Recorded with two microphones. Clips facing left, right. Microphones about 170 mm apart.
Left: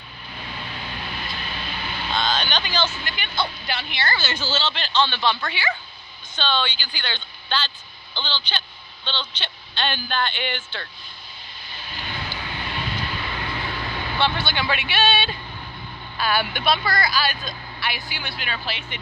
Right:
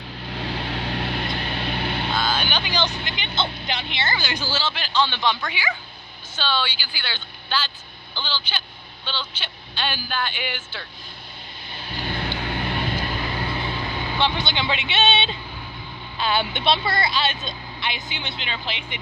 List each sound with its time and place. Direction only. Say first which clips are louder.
0.3 s vehicle: right 7 dB; 75° right (ahead or behind); by 2.0 s 60° right (ahead or behind)
2.1 s vehicle: left 4 dB; 10° right (ahead or behind)
3.0 s speech: even; 20° right (ahead or behind)
12.1 s vehicle: right 5 dB; 50° right (ahead or behind); by 15.3 s 20° right (ahead or behind)
16.2 s speech: even; 20° right (ahead or behind)